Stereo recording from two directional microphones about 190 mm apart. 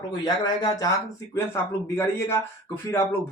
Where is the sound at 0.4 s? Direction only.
20° left (ahead or behind).